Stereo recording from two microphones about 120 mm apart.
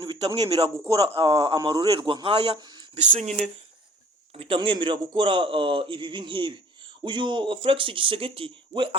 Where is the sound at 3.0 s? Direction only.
70° right (ahead or behind).